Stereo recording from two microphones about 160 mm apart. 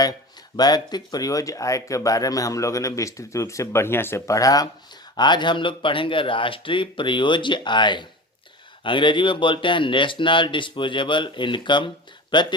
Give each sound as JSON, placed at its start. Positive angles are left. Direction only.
{"t": 0.5, "sound": "speech", "side_deg": 25}